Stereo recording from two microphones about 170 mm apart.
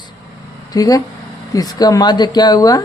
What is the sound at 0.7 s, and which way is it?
A woman's voice, 20° left (ahead or behind).